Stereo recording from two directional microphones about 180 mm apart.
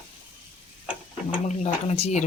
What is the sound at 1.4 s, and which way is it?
Speech, 40° left (ahead or behind).